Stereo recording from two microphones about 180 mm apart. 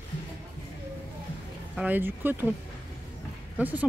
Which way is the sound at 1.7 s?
10° right (ahead or behind).